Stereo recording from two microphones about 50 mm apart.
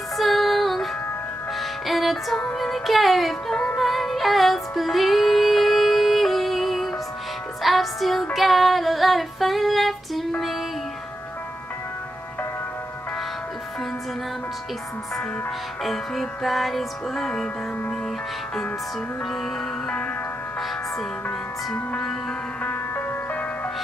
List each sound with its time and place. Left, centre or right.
0.2 s music: centre
7.6 s female singing: centre
15.8 s music: centre
22.6 s music: left